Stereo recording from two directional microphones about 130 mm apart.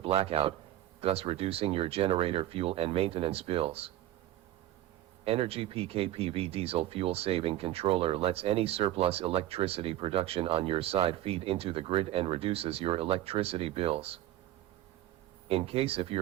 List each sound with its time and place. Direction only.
0.0 s speech: 45° right (ahead or behind)
5.2 s speech: 45° right (ahead or behind)
15.4 s speech: 45° right (ahead or behind)